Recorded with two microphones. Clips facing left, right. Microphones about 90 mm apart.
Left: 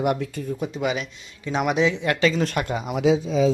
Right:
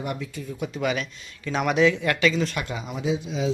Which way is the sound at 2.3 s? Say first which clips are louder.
Left 3 dB; 45° left (ahead or behind).